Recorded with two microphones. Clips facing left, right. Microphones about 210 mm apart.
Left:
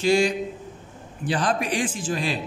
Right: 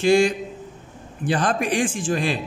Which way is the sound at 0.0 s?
55° right (ahead or behind).